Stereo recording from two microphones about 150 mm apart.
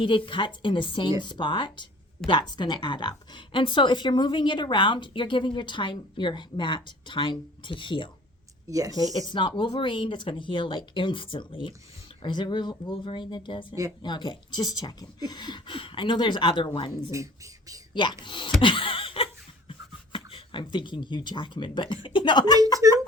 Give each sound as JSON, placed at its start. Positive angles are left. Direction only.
{"t": 0.0, "sound": "a woman's voice", "side_deg": 35}
{"t": 8.6, "sound": "speech", "side_deg": -25}
{"t": 9.1, "sound": "a woman's voice", "side_deg": 30}
{"t": 17.1, "sound": "speech", "side_deg": -20}
{"t": 17.9, "sound": "a woman's voice", "side_deg": 30}
{"t": 18.6, "sound": "laughter", "side_deg": 35}
{"t": 20.1, "sound": "a woman's voice", "side_deg": 35}
{"t": 22.8, "sound": "speech", "side_deg": -20}